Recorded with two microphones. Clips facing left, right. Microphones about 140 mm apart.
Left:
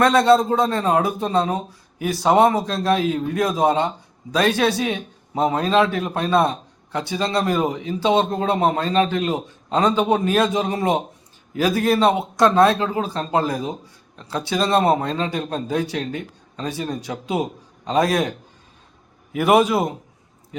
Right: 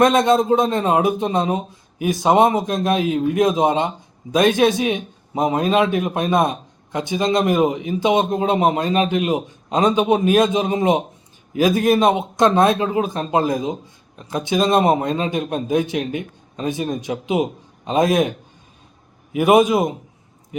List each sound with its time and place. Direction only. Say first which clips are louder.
0.0 s a man's voice: even; 20° right (ahead or behind)